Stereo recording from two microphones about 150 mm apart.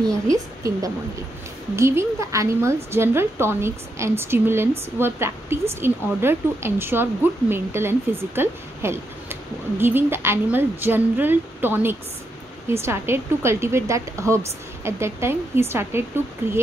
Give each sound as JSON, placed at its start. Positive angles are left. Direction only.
{"t": 0.3, "sound": "a woman's voice", "side_deg": -25}